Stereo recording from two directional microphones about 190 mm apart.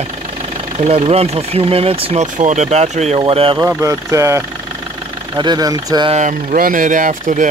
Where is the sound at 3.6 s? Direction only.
15° right (ahead or behind).